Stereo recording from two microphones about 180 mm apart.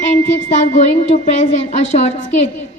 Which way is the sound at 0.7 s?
35° left (ahead or behind).